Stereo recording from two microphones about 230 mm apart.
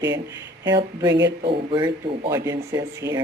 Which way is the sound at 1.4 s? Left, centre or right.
Right.